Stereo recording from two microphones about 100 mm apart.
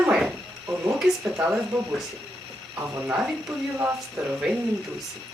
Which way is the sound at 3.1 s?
5° right (ahead or behind).